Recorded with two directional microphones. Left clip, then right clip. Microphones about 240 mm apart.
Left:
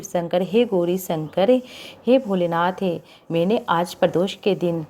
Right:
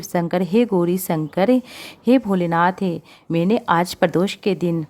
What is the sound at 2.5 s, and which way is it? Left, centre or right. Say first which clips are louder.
Speech: right 3 dB; right.